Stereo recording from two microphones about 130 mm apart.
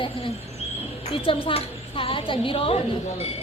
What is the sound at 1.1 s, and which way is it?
A woman's voice, 40° left (ahead or behind).